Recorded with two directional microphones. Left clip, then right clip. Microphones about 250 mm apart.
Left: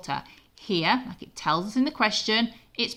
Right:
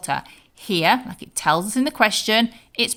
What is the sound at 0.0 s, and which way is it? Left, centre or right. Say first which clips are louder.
Speech: right 7 dB; right.